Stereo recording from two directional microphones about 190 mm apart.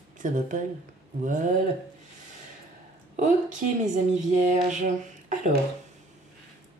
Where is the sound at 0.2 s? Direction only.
45° right (ahead or behind).